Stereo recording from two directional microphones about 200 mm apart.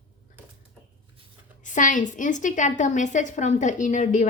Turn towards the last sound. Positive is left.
turn(degrees=35)  # may be behind; listen again after turning